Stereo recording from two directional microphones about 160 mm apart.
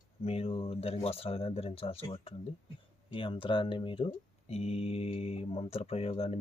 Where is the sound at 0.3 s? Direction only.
40° left (ahead or behind).